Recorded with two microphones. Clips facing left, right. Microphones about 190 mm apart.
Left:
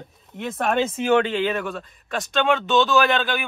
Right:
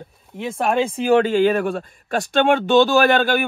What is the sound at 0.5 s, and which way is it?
Speech, 35° right (ahead or behind).